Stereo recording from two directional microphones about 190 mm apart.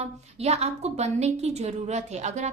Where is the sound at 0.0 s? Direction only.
35° right (ahead or behind).